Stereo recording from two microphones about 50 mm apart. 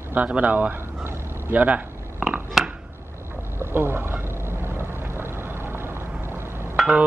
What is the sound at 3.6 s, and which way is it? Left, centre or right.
Vehicle, right.